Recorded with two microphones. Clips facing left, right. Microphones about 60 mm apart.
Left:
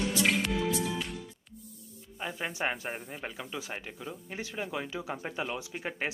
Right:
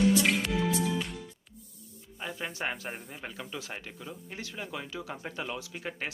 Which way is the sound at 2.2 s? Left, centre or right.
Centre.